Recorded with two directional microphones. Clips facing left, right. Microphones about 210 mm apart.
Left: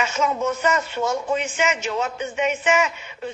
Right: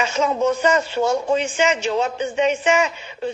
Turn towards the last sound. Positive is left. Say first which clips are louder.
# right 3 dB
turn(degrees=-30)  # may be behind; listen again after turning